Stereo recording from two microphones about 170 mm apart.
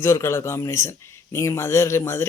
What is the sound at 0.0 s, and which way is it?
Speech, 15° left (ahead or behind).